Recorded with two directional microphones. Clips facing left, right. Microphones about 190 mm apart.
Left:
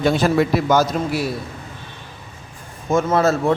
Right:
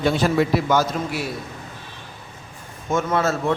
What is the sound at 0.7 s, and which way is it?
Speech, 40° left (ahead or behind).